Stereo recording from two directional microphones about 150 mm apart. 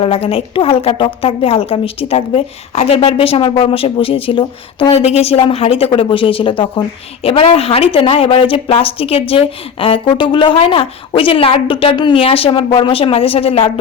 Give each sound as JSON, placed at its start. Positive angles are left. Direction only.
{"t": 0.0, "sound": "a woman's voice", "side_deg": 40}